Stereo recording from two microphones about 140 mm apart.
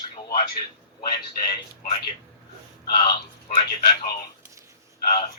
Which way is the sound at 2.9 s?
30° left (ahead or behind).